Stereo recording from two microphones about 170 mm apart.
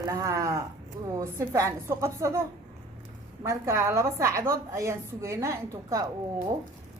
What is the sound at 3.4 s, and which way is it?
A woman's voice, 15° right (ahead or behind).